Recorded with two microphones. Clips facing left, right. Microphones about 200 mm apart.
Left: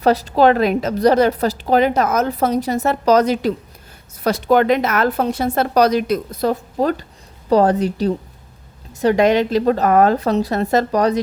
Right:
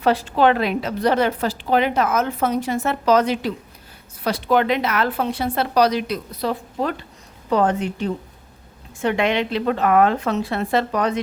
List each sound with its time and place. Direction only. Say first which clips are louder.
0.0 s a woman's voice: left 3 dB; 40° left (ahead or behind)